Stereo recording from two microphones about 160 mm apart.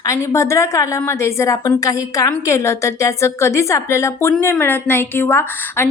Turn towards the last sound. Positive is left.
turn(degrees=15)  # may be behind; listen again after turning